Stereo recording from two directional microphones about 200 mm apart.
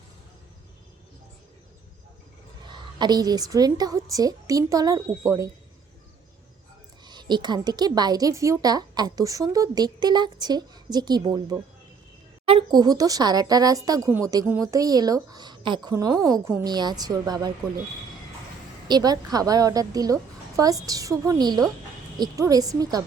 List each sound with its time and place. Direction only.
2.6 s a woman's voice: 20° right (ahead or behind)
7.0 s speech: 20° right (ahead or behind)
18.9 s a woman's voice: 20° right (ahead or behind)